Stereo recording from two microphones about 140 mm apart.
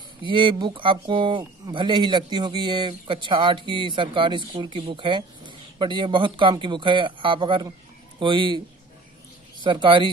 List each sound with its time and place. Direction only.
0.2 s speech: 35° right (ahead or behind)